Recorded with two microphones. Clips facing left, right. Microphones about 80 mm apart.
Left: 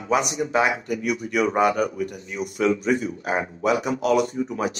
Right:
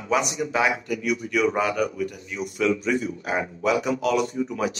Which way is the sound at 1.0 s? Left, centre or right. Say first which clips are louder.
Even; left.